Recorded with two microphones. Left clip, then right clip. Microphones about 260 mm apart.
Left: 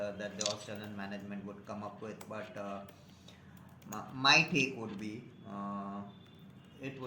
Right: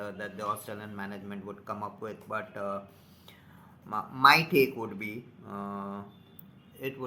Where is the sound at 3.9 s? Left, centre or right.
Right.